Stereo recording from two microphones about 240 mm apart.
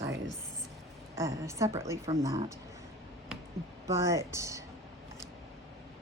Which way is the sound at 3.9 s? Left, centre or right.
Centre.